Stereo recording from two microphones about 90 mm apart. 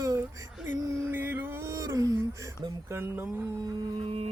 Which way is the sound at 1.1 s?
20° right (ahead or behind).